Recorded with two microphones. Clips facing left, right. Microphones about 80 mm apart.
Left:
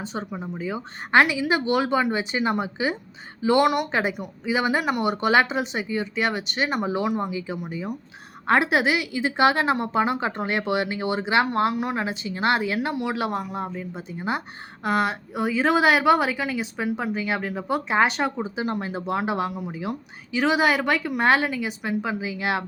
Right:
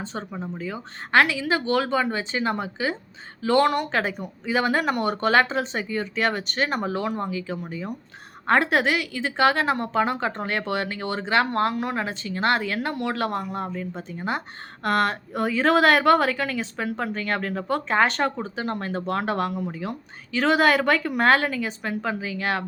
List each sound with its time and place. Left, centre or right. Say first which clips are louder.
0.1 s a woman's voice: left 1 dB; centre